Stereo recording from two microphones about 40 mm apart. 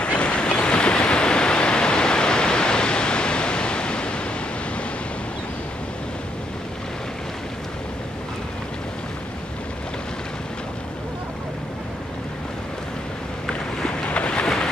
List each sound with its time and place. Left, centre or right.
0.0 s waves: left
14.0 s vehicle: left